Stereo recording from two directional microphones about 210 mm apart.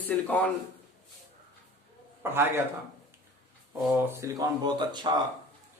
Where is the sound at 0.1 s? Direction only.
10° left (ahead or behind).